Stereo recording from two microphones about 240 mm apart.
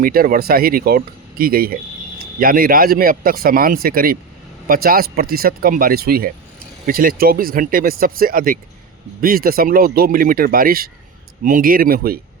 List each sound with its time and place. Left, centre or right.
0.0 s speech: right